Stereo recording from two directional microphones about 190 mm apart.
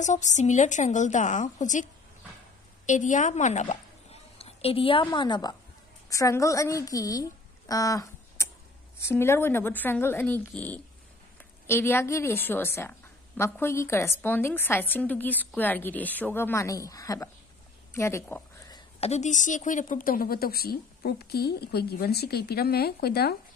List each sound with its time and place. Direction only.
0.0 s a woman's voice: 40° left (ahead or behind)
2.9 s a woman's voice: 40° left (ahead or behind); by 17.3 s 20° left (ahead or behind)
17.9 s a sound: 15° left (ahead or behind)
18.9 s a woman's voice: 35° left (ahead or behind); by 23.3 s 55° left (ahead or behind)